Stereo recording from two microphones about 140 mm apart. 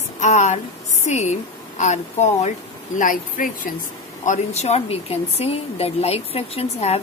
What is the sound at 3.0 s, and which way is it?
Speech, 70° left (ahead or behind).